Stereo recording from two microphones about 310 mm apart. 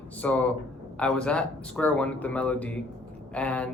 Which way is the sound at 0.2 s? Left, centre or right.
Centre.